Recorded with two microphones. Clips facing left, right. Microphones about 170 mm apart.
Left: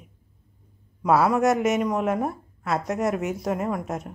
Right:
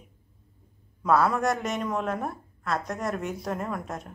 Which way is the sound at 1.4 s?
20° left (ahead or behind).